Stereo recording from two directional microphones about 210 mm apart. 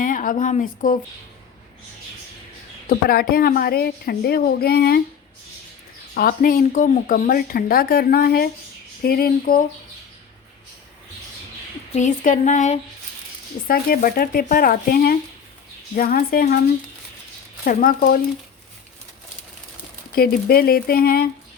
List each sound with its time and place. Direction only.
0.0 s speech: 40° left (ahead or behind)
2.9 s speech: 45° left (ahead or behind)
6.1 s speech: 45° left (ahead or behind)
11.9 s speech: 35° left (ahead or behind)
13.7 s speech: 45° left (ahead or behind)
17.7 s speech: 45° left (ahead or behind)
20.1 s speech: 45° left (ahead or behind)